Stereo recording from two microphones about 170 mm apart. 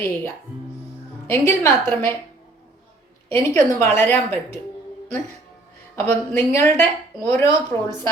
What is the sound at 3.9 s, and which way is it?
Speech, 10° left (ahead or behind).